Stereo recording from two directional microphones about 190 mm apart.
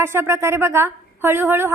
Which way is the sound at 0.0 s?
10° right (ahead or behind).